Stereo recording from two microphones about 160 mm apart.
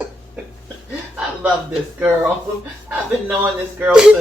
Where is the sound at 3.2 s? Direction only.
10° right (ahead or behind).